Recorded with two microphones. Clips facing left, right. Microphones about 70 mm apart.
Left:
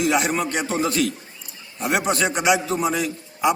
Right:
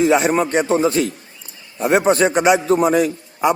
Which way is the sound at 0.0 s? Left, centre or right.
Right.